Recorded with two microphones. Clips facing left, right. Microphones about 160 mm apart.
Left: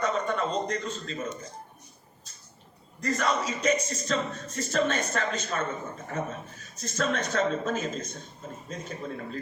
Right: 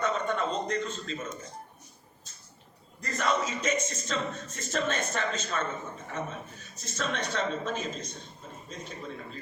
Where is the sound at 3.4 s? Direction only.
40° left (ahead or behind).